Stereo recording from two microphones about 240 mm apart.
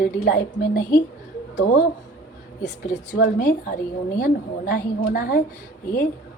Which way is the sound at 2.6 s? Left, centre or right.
Left.